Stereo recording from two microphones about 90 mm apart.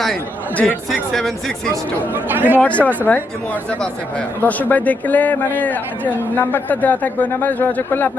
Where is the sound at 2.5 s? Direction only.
15° left (ahead or behind).